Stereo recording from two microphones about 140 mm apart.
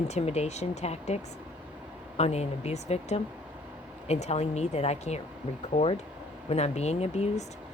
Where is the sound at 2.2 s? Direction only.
50° left (ahead or behind).